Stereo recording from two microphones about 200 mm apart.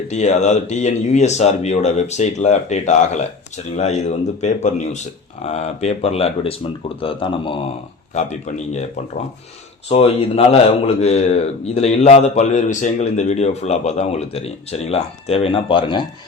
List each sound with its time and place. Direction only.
0.1 s a man's voice: 35° left (ahead or behind)
8.1 s a man's voice: 35° left (ahead or behind)
9.9 s a man's voice: 30° left (ahead or behind)